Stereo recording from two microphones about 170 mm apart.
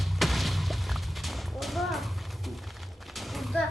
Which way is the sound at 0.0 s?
Centre (ahead or behind).